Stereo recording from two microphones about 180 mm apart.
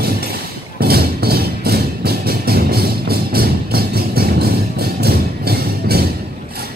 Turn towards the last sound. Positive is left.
turn(degrees=-60)  # may be behind; listen again after turning